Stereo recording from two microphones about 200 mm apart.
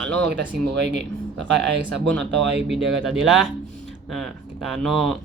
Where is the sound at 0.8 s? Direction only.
60° right (ahead or behind).